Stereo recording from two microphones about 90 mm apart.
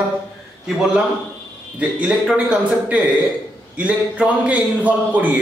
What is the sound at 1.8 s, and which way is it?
A man's voice, 15° right (ahead or behind).